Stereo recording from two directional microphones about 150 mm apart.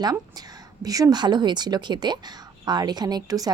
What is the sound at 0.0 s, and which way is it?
A woman's voice, 25° right (ahead or behind).